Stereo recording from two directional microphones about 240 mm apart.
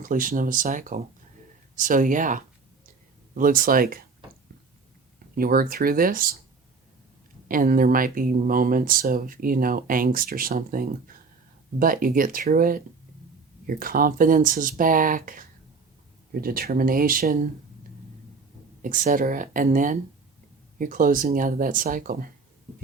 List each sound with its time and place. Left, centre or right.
0.0 s speech: right
5.3 s speech: right
7.4 s speech: right
18.8 s speech: right